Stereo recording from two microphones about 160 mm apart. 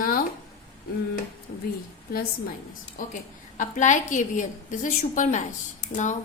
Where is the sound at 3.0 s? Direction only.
55° left (ahead or behind).